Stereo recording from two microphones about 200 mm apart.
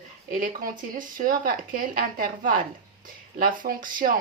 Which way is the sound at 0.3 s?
45° right (ahead or behind).